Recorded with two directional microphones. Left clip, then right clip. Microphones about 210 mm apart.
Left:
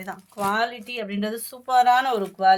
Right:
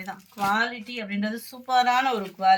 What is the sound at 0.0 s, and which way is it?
Speech, 50° left (ahead or behind).